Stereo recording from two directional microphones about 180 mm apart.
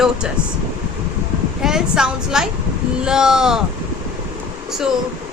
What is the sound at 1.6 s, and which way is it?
A woman's voice, 5° right (ahead or behind).